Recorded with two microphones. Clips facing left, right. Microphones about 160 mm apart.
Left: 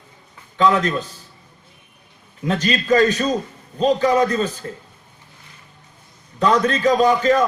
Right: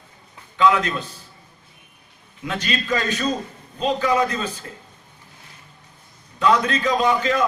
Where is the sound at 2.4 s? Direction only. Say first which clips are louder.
Left 5 dB; 40° left (ahead or behind).